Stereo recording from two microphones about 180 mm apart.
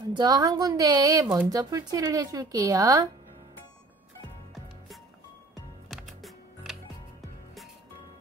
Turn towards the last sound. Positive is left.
turn(degrees=0)  # may be behind; listen again after turning